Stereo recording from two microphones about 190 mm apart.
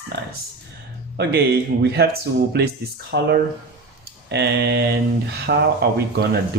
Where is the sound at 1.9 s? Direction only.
55° right (ahead or behind).